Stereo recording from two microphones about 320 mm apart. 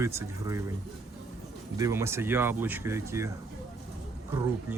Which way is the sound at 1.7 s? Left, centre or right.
Centre.